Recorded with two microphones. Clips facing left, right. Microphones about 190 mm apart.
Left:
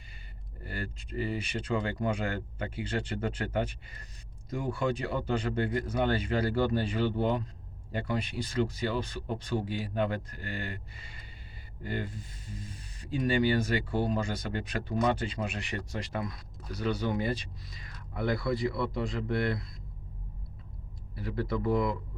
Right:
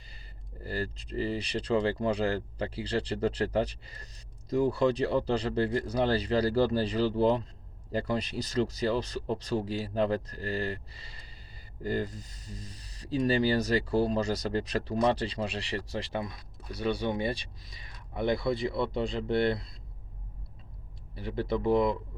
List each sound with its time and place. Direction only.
0.6 s speech: 35° right (ahead or behind)
21.2 s speech: 25° right (ahead or behind)